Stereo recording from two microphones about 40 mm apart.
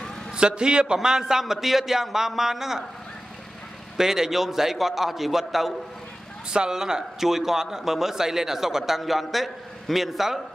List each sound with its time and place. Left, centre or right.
0.3 s a man's voice: right
4.0 s a man's voice: centre
6.5 s a man's voice: centre